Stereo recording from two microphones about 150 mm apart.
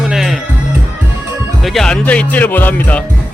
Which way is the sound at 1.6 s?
Centre (ahead or behind).